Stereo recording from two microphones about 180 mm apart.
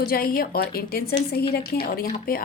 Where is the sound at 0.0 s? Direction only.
55° left (ahead or behind).